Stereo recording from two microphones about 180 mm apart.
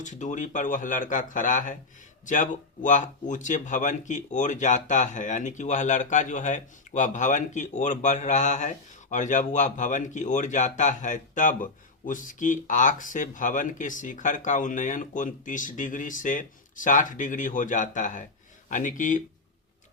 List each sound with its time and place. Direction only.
0.0 s speech: 45° left (ahead or behind)